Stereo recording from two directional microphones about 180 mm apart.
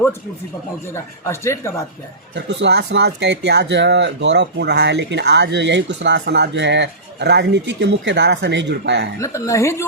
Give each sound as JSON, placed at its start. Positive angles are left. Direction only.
{"t": 0.9, "sound": "speech", "side_deg": 15}
{"t": 2.3, "sound": "speech", "side_deg": -75}
{"t": 9.2, "sound": "speech", "side_deg": 15}